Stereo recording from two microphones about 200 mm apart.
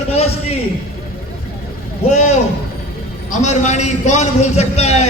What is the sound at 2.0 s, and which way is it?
A man's voice, 35° left (ahead or behind).